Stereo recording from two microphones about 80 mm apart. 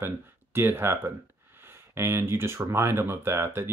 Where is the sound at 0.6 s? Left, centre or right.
Right.